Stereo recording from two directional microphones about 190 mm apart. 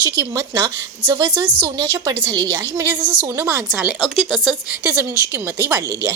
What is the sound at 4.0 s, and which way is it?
Speech, centre (ahead or behind).